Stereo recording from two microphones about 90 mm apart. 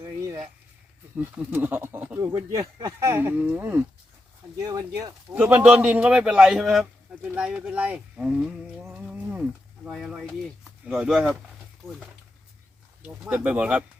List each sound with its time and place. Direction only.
0.0 s a sound: 30° right (ahead or behind)
1.1 s speech: 20° right (ahead or behind)
2.2 s speech: 40° right (ahead or behind); by 3.8 s 25° right (ahead or behind)
4.6 s speech: 45° right (ahead or behind)
5.3 s a man's voice: 20° right (ahead or behind)
8.9 s livestock: 15° right (ahead or behind)
9.9 s speech: 5° right (ahead or behind)
13.2 s a man's voice: 15° right (ahead or behind)